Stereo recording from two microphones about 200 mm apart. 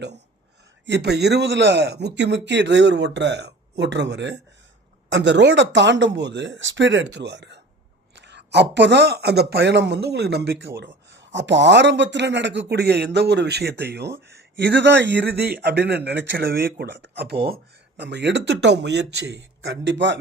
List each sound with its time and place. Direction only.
0.9 s speech: 60° right (ahead or behind)